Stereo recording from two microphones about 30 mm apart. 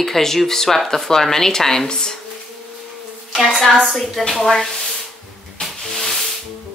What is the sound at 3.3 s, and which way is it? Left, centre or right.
A woman's voice, centre.